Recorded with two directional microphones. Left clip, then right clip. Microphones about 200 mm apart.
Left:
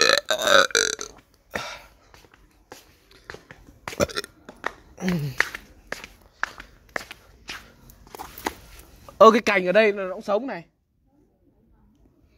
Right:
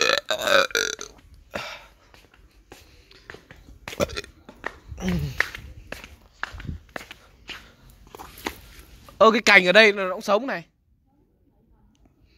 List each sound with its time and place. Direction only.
0.0 s burping: 15° left (ahead or behind)
3.8 s hiccup: 15° left (ahead or behind)
4.5 s a sound: centre (ahead or behind)
4.9 s speech: 15° left (ahead or behind)
5.4 s walk: centre (ahead or behind)
9.0 s a sound: 15° left (ahead or behind)
9.6 s a man's voice: 5° right (ahead or behind)
10.0 s a man's voice: 15° right (ahead or behind)